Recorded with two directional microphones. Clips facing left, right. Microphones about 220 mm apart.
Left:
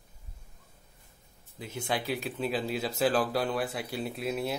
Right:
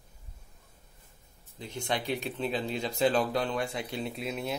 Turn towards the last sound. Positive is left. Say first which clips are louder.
# left 2 dB
turn(degrees=0)  # may be behind; listen again after turning